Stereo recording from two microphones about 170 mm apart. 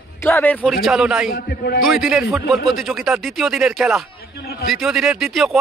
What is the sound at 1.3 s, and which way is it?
Speech, 70° left (ahead or behind).